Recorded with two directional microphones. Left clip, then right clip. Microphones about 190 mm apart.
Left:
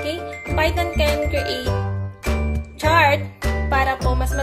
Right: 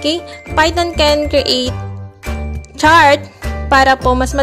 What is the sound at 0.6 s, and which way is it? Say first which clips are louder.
Music: right 8 dB; 55° right (ahead or behind).